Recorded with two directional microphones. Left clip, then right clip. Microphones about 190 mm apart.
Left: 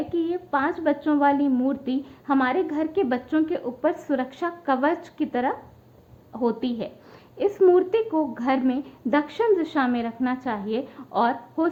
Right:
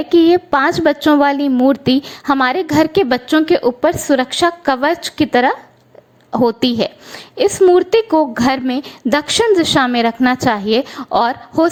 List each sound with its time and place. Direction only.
0.1 s a woman's voice: 45° right (ahead or behind)
7.5 s a woman's voice: 30° right (ahead or behind)